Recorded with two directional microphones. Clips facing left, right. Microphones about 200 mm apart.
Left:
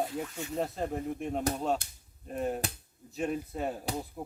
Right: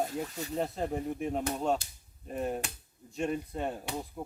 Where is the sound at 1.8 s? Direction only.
55° left (ahead or behind).